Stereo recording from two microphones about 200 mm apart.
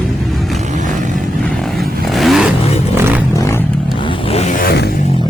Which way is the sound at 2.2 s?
Centre (ahead or behind).